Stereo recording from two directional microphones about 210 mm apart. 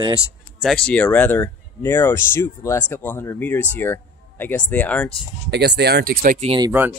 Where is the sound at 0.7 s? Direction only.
5° left (ahead or behind).